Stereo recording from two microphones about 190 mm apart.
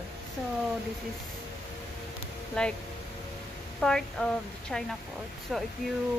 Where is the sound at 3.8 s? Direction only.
5° left (ahead or behind).